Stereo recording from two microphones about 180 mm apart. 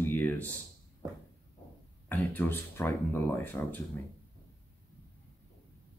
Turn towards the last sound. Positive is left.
turn(degrees=10)  # may be behind; listen again after turning